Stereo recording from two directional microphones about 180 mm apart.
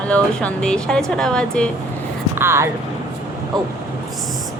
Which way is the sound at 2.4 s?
15° right (ahead or behind).